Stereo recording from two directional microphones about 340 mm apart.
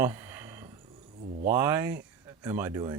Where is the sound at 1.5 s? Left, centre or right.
Centre.